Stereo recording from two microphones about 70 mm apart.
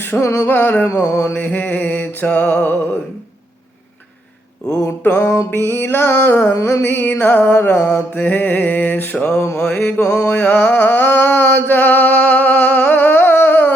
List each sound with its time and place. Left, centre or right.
0.2 s mantra: left
0.4 s mantra: left
0.9 s mantra: left
1.3 s mantra: left
5.1 s mantra: left
6.6 s mantra: left
6.8 s mantra: left
9.2 s mantra: left
9.6 s mantra: left
10.2 s a sound: left